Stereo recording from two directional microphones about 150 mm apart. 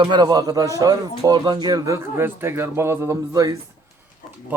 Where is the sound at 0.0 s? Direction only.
30° right (ahead or behind).